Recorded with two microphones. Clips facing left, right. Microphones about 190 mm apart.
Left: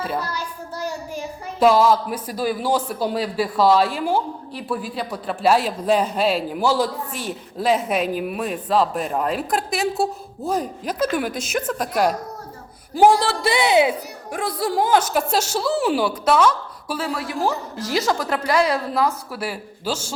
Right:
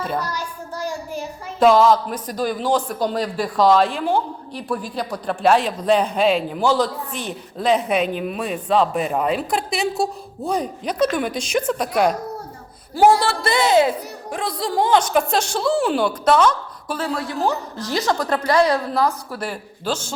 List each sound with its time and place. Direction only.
0.0 s speech: 5° left (ahead or behind)
1.5 s speech: 5° left (ahead or behind)
12.9 s a woman's voice: 15° left (ahead or behind)